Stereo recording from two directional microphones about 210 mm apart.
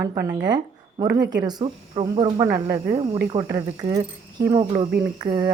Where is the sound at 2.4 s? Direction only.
15° right (ahead or behind).